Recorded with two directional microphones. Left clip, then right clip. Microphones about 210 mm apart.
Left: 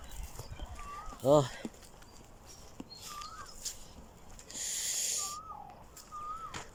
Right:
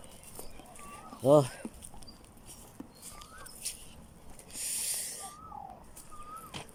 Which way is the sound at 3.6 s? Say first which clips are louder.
Even; 10° right (ahead or behind).